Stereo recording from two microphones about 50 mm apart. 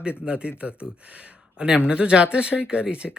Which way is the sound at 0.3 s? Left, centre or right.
Right.